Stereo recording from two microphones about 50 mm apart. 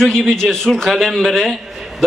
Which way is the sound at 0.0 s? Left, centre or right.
Centre.